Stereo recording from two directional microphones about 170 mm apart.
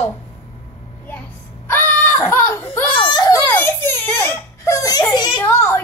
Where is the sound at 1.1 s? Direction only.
10° left (ahead or behind).